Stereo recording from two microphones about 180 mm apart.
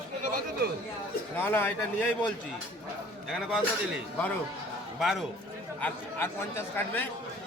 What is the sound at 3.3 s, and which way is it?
A man's voice, centre (ahead or behind).